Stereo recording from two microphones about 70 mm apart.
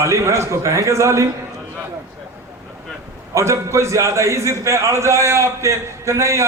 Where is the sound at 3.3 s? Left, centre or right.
Right.